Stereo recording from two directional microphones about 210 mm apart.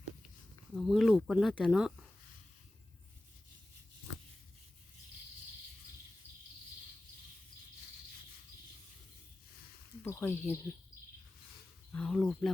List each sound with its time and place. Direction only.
0.7 s speech: centre (ahead or behind)
10.0 s speech: 10° left (ahead or behind)
11.9 s speech: 5° left (ahead or behind)